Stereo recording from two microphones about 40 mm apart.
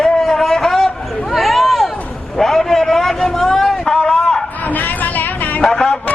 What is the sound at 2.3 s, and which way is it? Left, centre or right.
A man's voice, centre.